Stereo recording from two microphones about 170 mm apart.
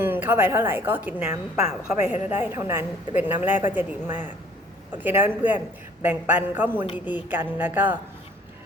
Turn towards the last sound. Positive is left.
turn(degrees=-10)  # may be behind; listen again after turning